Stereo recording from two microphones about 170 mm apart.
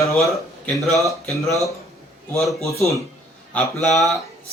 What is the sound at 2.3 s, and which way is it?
Speech, centre (ahead or behind).